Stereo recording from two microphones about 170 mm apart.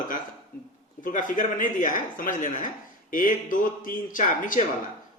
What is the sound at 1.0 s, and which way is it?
Speech, 50° left (ahead or behind).